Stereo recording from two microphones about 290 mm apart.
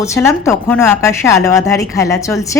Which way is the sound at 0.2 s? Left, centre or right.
Centre.